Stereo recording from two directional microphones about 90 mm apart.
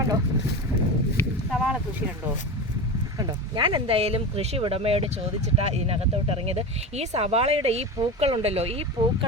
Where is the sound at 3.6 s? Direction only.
85° right.